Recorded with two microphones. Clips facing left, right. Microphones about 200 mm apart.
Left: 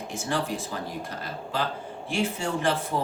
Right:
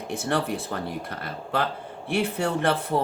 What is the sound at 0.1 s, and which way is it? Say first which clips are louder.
Speech: right 3 dB; 60° right (ahead or behind).